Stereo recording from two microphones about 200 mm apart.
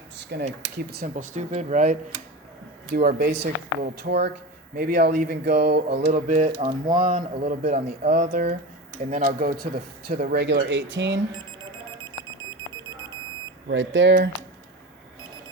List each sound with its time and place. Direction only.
0.4 s a man's voice: 35° right (ahead or behind)
0.9 s speech: 50° right (ahead or behind)
1.1 s a man's voice: 35° right (ahead or behind)
2.9 s speech: 50° right (ahead or behind)
6.1 s a man's voice: 40° right (ahead or behind); by 11.2 s 65° right (ahead or behind)
12.4 s a sound: 20° right (ahead or behind)
13.7 s speech: 65° right (ahead or behind)